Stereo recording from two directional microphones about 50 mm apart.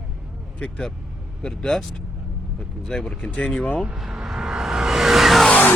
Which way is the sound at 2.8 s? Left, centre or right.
Centre.